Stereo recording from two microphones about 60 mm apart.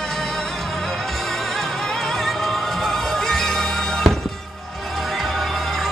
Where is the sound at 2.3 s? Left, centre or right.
Centre.